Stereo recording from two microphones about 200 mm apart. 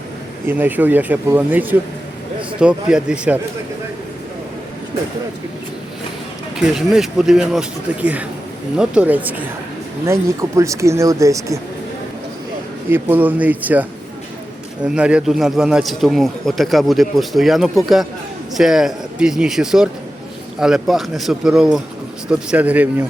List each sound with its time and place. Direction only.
0.4 s speech: 10° right (ahead or behind)
6.6 s speech: centre (ahead or behind)
10.6 s speech: 15° right (ahead or behind)
12.9 s speech: 10° right (ahead or behind)
14.8 s speech: 5° right (ahead or behind)